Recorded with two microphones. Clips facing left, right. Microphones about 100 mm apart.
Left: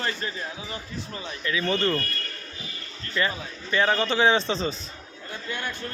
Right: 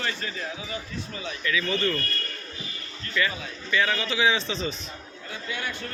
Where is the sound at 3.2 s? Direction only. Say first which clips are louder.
Left 1 dB; 35° left (ahead or behind).